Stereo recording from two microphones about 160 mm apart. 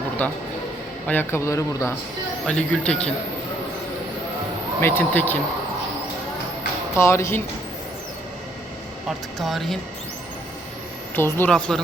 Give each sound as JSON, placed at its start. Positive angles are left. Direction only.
{"t": 0.2, "sound": "a man's voice", "side_deg": 10}
{"t": 2.5, "sound": "speech", "side_deg": 5}
{"t": 4.8, "sound": "a man's voice", "side_deg": 15}
{"t": 6.9, "sound": "a man's voice", "side_deg": 15}
{"t": 9.0, "sound": "speech", "side_deg": 0}
{"t": 11.1, "sound": "a man's voice", "side_deg": 10}